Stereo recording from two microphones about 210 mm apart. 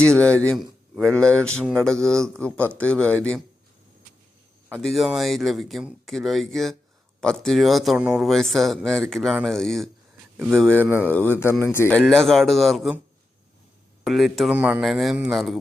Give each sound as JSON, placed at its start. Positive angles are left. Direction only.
{"t": 0.0, "sound": "speech", "side_deg": 5}
{"t": 4.7, "sound": "speech", "side_deg": 0}
{"t": 10.8, "sound": "speech", "side_deg": -10}
{"t": 11.1, "sound": "speech", "side_deg": 10}
{"t": 14.0, "sound": "speech", "side_deg": 0}